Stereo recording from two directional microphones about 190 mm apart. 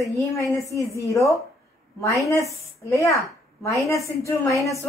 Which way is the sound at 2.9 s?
15° left (ahead or behind).